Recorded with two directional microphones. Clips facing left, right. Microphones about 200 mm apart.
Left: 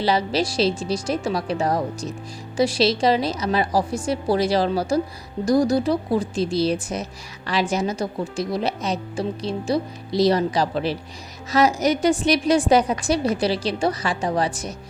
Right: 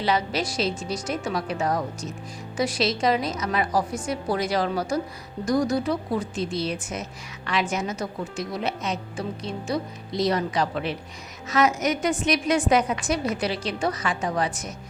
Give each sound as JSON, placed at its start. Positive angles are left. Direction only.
{"t": 0.0, "sound": "a woman's voice", "side_deg": 35}